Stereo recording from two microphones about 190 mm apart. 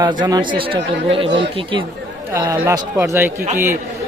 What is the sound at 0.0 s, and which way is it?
A man's voice, 20° right (ahead or behind).